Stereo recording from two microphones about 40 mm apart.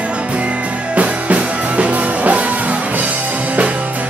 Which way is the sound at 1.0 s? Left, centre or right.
Right.